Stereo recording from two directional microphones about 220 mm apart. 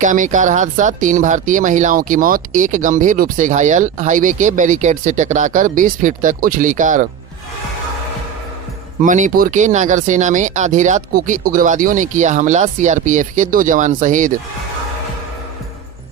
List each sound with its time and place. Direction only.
0.0 s speech: 35° right (ahead or behind)
9.0 s speech: 35° right (ahead or behind)